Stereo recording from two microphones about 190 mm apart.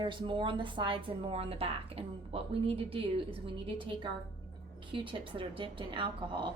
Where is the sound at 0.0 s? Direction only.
25° right (ahead or behind).